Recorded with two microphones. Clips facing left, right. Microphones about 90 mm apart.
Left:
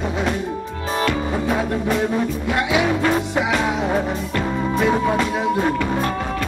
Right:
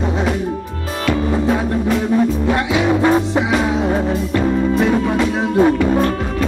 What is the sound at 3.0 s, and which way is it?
Music, 25° right (ahead or behind).